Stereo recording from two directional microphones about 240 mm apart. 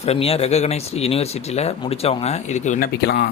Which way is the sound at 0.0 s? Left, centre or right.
Left.